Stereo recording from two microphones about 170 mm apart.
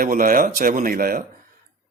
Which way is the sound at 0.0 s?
50° right (ahead or behind).